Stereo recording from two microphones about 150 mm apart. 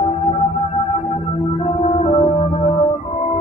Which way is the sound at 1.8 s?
45° left (ahead or behind).